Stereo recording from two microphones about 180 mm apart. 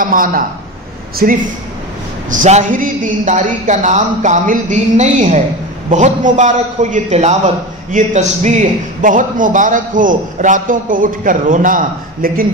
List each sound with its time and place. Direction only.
0.0 s a man's voice: 50° right (ahead or behind)
2.4 s a man's voice: 45° right (ahead or behind)